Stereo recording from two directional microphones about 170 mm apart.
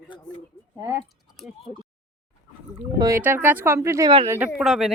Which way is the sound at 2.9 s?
20° right (ahead or behind).